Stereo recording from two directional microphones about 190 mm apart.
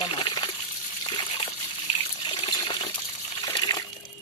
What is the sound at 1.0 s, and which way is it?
Water, 25° left (ahead or behind).